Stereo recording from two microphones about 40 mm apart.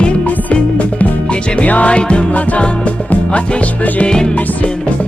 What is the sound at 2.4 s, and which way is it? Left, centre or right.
Music, left.